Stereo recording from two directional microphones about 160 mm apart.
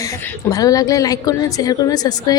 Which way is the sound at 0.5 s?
20° left (ahead or behind).